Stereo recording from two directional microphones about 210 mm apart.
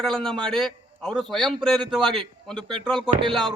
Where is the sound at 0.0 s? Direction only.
5° left (ahead or behind).